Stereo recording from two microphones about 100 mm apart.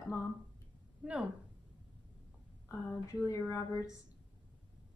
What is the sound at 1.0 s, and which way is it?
Speech, 10° right (ahead or behind).